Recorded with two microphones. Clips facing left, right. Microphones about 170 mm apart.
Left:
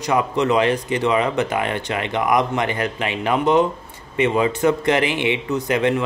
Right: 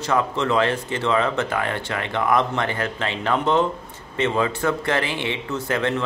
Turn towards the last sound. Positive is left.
turn(degrees=15)  # may be behind; listen again after turning